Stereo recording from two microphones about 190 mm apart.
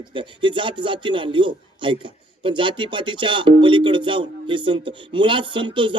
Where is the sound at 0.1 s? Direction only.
25° right (ahead or behind).